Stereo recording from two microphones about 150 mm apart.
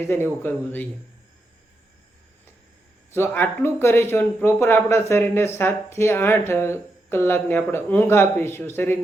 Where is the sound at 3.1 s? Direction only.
15° left (ahead or behind).